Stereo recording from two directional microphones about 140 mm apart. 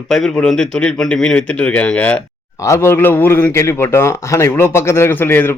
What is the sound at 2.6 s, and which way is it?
A man's voice, 20° left (ahead or behind).